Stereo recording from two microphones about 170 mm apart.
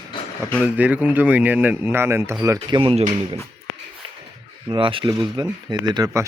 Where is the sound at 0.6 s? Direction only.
10° right (ahead or behind).